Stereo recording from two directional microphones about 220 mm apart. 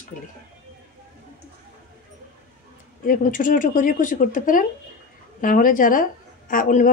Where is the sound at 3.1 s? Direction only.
35° left (ahead or behind).